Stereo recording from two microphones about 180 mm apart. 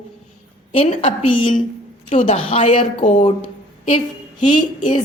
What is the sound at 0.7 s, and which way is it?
Speech, 30° left (ahead or behind).